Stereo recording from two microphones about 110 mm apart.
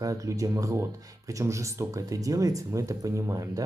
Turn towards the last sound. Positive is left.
turn(degrees=-30)  # may be behind; listen again after turning